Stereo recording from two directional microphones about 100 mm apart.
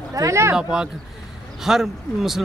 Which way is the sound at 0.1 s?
30° right (ahead or behind).